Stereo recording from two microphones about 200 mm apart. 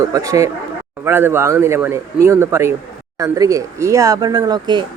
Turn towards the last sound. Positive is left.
turn(degrees=-20)  # may be behind; listen again after turning